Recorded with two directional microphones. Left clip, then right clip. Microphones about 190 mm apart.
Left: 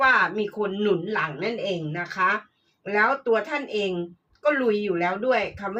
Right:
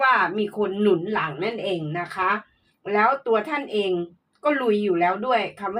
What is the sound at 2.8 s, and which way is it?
A woman's voice, 35° right (ahead or behind).